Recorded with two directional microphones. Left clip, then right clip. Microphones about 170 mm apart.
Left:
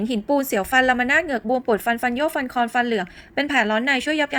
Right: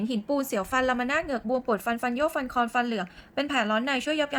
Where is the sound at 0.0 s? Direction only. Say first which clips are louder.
Left 7 dB; 15° left (ahead or behind).